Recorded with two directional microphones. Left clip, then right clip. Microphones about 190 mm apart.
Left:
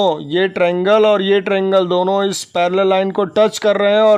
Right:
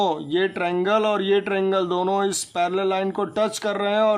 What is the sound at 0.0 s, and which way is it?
Speech, 30° left (ahead or behind).